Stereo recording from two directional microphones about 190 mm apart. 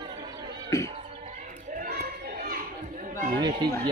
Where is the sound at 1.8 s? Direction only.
55° right (ahead or behind).